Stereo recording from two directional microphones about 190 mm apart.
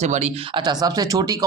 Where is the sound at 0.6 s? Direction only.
20° right (ahead or behind).